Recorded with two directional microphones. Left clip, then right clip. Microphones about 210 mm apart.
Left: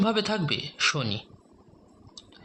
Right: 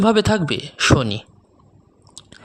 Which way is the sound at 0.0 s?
45° right (ahead or behind).